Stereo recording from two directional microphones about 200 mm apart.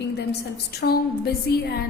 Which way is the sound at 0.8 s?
50° left (ahead or behind).